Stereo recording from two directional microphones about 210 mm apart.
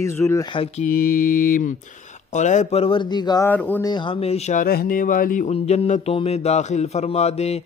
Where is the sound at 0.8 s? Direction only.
45° left (ahead or behind).